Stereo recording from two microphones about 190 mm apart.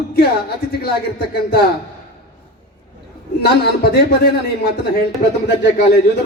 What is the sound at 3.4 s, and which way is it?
Speech, 55° left (ahead or behind).